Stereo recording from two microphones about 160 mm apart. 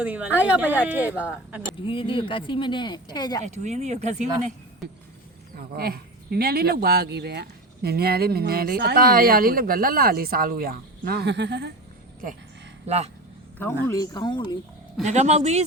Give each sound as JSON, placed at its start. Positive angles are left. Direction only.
{"t": 0.0, "sound": "speech", "side_deg": -10}
{"t": 1.8, "sound": "speech", "side_deg": 35}
{"t": 3.4, "sound": "speech", "side_deg": -45}
{"t": 5.5, "sound": "speech", "side_deg": -70}
{"t": 13.6, "sound": "speech", "side_deg": 15}
{"t": 13.9, "sound": "speech", "side_deg": 25}
{"t": 15.0, "sound": "speech", "side_deg": -45}